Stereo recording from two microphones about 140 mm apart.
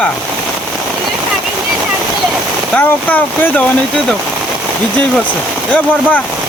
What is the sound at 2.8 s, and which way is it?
Speech, 15° left (ahead or behind).